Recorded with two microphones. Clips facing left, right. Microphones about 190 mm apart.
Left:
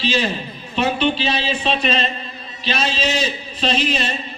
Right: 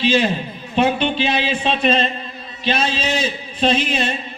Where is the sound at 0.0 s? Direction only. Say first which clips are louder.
Right 4 dB; 55° right (ahead or behind).